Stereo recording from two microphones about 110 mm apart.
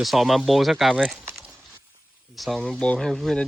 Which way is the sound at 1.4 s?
5° right (ahead or behind).